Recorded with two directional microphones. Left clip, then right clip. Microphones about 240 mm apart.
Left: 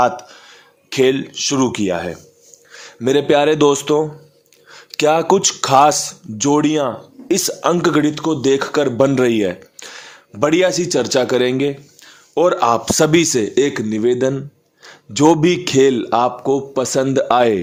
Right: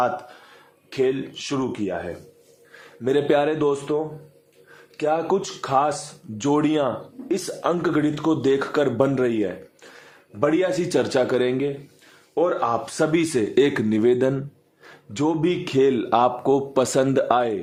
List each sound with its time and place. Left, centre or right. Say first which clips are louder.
0.9 s speech: left 8 dB; left
1.3 s speech: left 10 dB; centre
1.5 s speech: left 7 dB; left
6.3 s speech: left 5 dB; centre
7.3 s speech: left 7 dB; left
8.1 s speech: left 4 dB; centre; by 10.7 s left
10.7 s speech: left 5 dB; left
12.3 s speech: left 7 dB; left; by 14.4 s centre
15.2 s speech: left 10 dB; left; by 17.2 s centre
17.2 s speech: left 7 dB; left